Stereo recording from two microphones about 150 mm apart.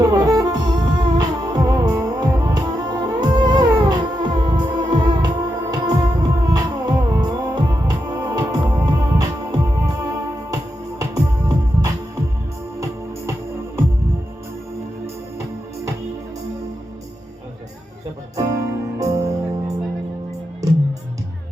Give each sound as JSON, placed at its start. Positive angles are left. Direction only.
{"t": 0.0, "sound": "music", "side_deg": -25}
{"t": 15.0, "sound": "music", "side_deg": -20}
{"t": 18.3, "sound": "music", "side_deg": -25}